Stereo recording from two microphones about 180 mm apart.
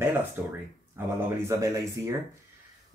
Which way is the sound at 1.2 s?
15° right (ahead or behind).